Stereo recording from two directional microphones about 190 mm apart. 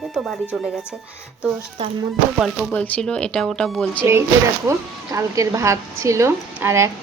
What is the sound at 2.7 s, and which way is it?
Speech, 10° left (ahead or behind).